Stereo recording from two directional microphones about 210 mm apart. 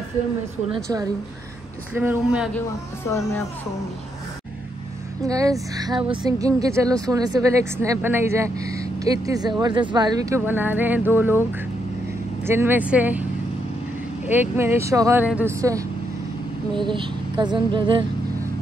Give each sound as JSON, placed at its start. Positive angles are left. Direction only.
{"t": 2.0, "sound": "a woman's voice", "side_deg": -5}
{"t": 5.2, "sound": "a woman's voice", "side_deg": -15}
{"t": 12.4, "sound": "a woman's voice", "side_deg": -10}
{"t": 14.2, "sound": "a woman's voice", "side_deg": -10}